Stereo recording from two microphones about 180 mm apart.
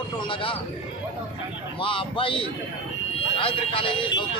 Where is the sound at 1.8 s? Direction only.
30° left (ahead or behind).